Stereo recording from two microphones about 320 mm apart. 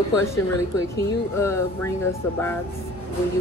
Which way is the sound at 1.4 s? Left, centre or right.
Centre.